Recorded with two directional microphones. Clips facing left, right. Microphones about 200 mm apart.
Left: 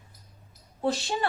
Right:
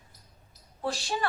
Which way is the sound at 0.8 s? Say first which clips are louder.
Left 4 dB; 25° left (ahead or behind).